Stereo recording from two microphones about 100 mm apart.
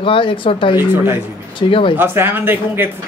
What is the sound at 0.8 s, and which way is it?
Speech, 20° right (ahead or behind).